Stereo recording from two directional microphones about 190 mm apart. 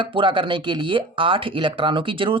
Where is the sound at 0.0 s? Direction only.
25° right (ahead or behind).